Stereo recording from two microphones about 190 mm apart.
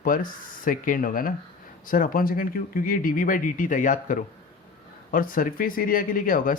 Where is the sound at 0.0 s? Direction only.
45° left (ahead or behind).